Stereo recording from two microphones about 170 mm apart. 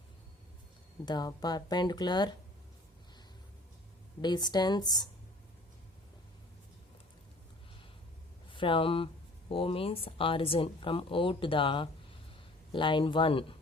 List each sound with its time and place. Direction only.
1.0 s speech: 25° left (ahead or behind)
4.2 s speech: 25° left (ahead or behind)
8.4 s speech: 30° left (ahead or behind)